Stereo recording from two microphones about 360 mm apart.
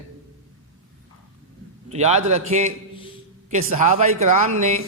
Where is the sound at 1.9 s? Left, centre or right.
Centre.